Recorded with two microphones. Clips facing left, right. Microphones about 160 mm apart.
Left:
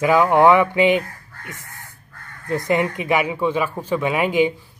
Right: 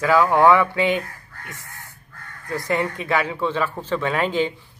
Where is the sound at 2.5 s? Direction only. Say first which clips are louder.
Left 4 dB; 20° left (ahead or behind).